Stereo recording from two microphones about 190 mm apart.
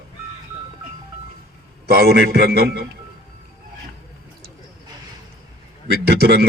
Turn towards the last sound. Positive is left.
turn(degrees=-55)  # may be behind; listen again after turning